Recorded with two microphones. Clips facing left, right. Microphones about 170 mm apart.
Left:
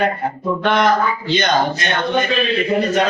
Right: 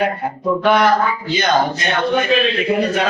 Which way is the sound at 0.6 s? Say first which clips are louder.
Right 2 dB; 5° right (ahead or behind).